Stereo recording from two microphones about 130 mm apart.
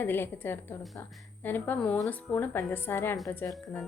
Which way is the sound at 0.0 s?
15° left (ahead or behind).